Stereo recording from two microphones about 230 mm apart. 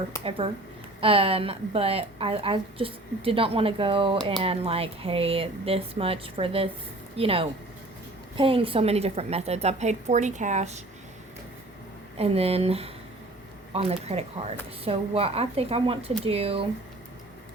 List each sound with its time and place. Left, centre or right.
0.3 s a woman's voice: right
12.1 s a woman's voice: right